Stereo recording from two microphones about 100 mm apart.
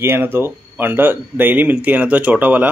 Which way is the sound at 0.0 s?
20° right (ahead or behind).